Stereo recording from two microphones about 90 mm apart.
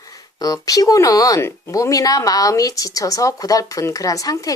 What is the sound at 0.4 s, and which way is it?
A woman's voice, 45° left (ahead or behind).